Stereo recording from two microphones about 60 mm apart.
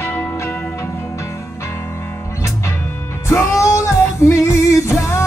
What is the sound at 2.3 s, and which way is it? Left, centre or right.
Music, left.